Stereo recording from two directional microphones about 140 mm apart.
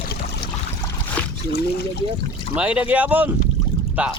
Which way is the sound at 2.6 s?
10° right (ahead or behind).